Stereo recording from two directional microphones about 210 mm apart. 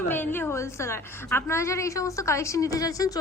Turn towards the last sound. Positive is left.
turn(degrees=15)  # may be behind; listen again after turning